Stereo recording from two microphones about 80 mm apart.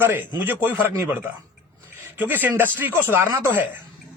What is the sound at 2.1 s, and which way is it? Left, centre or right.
A man's voice, right.